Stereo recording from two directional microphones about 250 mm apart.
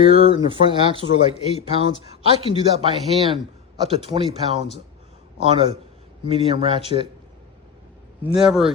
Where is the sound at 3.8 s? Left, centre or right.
Right.